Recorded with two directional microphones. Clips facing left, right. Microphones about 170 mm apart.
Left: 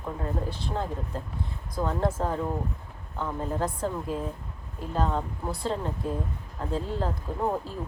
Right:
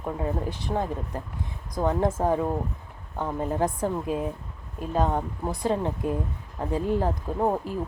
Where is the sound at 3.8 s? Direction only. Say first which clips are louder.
Right 3 dB; 15° right (ahead or behind).